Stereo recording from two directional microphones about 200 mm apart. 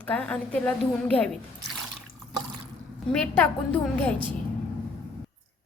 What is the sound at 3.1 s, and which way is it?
A woman's voice, 5° left (ahead or behind).